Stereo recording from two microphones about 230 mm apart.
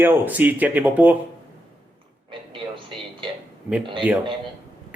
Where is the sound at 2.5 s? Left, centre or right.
Right.